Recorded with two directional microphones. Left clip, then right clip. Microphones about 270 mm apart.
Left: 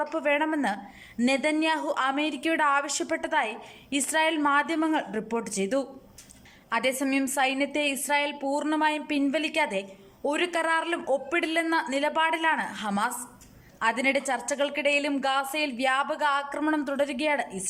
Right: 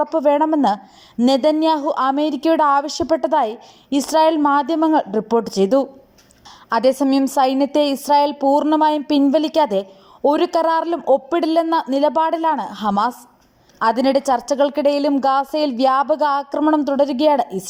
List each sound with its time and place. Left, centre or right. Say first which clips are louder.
0.0 s a woman's voice: right 10 dB; centre